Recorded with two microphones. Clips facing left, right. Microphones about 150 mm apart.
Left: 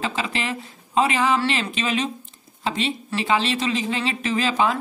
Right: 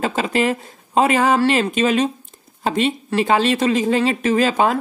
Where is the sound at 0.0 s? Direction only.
45° right (ahead or behind).